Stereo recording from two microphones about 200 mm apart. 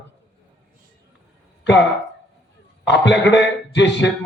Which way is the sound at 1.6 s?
60° left (ahead or behind).